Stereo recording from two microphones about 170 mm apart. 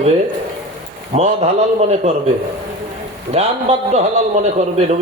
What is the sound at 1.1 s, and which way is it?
Speech, 40° right (ahead or behind).